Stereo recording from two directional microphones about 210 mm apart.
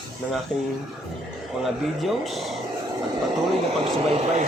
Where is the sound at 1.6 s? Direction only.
Centre (ahead or behind).